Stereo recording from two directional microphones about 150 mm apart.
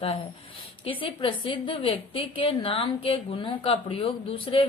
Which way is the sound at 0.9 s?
35° left (ahead or behind).